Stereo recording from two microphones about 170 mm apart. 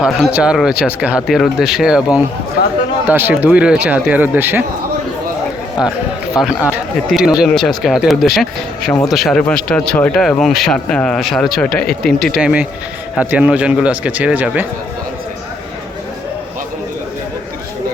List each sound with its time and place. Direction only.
0.0 s speech: 5° right (ahead or behind)
5.8 s speech: 5° right (ahead or behind)